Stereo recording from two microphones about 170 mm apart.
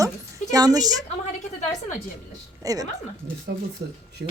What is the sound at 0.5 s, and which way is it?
Speech, 20° right (ahead or behind).